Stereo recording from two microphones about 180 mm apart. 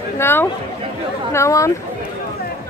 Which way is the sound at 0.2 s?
10° left (ahead or behind).